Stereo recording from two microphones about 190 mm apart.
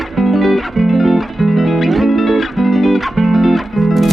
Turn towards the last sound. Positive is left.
turn(degrees=0)  # may be behind; listen again after turning